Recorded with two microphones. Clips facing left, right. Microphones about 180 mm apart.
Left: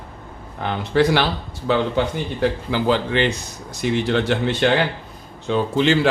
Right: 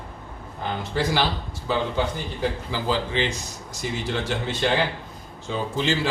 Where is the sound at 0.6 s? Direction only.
65° left (ahead or behind).